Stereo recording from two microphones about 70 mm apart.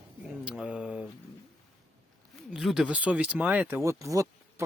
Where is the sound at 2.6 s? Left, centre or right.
Centre; by 3.8 s right.